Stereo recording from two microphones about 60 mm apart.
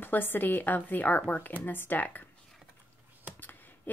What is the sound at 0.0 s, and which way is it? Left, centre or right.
Speech, left.